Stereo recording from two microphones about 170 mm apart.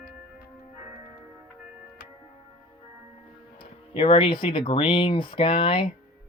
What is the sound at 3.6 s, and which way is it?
Speech, 30° left (ahead or behind).